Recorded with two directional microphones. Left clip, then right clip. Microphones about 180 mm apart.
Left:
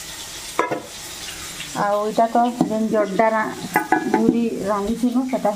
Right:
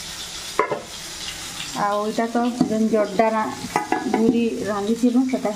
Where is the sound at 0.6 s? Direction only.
35° left (ahead or behind).